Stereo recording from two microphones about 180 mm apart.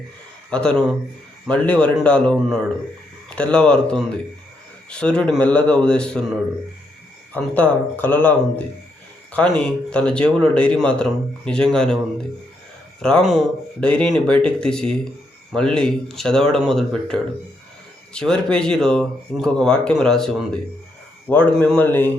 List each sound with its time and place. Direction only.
0.5 s speech: 5° left (ahead or behind)
7.3 s speech: 10° left (ahead or behind)
13.0 s speech: 5° left (ahead or behind)